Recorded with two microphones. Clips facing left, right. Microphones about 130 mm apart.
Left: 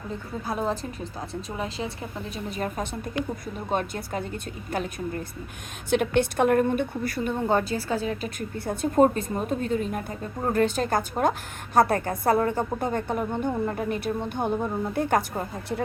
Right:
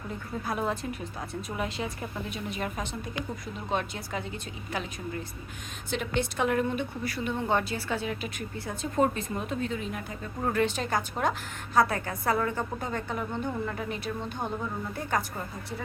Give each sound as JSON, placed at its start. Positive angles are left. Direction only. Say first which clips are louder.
{"t": 0.4, "sound": "a woman's voice", "louder": "left 2 dB", "side_deg": 30}
{"t": 8.5, "sound": "a woman's voice", "louder": "left 7 dB", "side_deg": 55}
{"t": 9.3, "sound": "a woman's voice", "louder": "left 5 dB", "side_deg": 45}
{"t": 14.4, "sound": "a woman's voice", "louder": "left 8 dB", "side_deg": 60}